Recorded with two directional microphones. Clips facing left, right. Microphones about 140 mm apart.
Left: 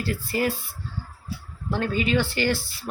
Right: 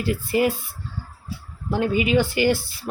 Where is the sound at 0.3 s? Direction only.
20° right (ahead or behind).